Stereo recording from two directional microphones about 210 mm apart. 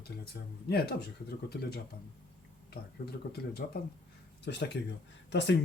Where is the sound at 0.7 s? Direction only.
50° left (ahead or behind).